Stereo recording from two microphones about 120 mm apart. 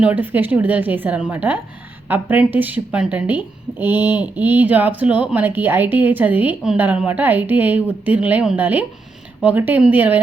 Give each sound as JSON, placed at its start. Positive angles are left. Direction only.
{"t": 0.0, "sound": "a woman's voice", "side_deg": -15}